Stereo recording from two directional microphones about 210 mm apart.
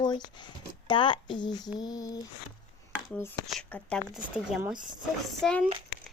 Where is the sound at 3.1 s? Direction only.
5° left (ahead or behind).